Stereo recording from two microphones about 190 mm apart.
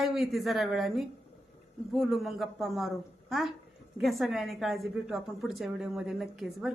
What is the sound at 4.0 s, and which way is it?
A man's voice, centre (ahead or behind).